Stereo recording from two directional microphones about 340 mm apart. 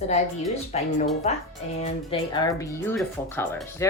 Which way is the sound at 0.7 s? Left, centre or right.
Centre.